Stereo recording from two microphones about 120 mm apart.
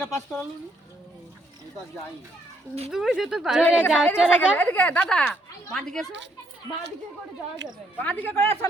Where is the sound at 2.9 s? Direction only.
5° right (ahead or behind).